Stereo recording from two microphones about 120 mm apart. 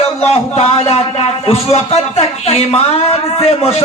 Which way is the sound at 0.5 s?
60° left (ahead or behind).